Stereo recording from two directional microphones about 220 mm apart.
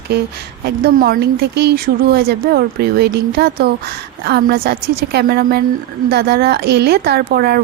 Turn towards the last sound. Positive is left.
turn(degrees=-45)  # may be behind; listen again after turning